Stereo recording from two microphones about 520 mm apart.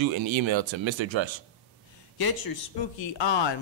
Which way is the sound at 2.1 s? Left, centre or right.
Left.